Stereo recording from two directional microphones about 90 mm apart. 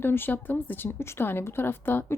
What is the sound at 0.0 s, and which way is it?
A woman's voice, 25° left (ahead or behind).